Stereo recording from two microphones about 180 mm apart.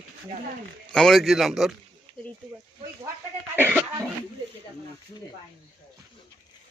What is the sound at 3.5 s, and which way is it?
Speech, 10° right (ahead or behind).